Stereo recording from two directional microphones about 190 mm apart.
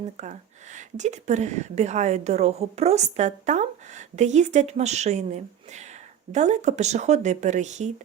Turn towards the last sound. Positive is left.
turn(degrees=-40)  # may be behind; listen again after turning